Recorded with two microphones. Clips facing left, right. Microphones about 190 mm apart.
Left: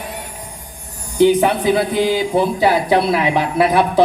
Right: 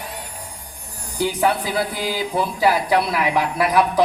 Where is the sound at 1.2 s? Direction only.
20° left (ahead or behind).